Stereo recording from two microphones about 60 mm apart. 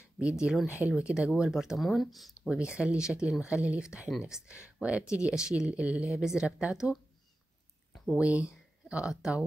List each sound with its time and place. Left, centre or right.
0.2 s speech: centre
2.5 s speech: centre
8.2 s speech: right